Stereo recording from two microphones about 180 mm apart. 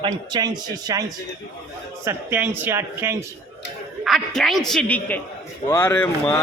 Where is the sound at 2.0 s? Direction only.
10° right (ahead or behind).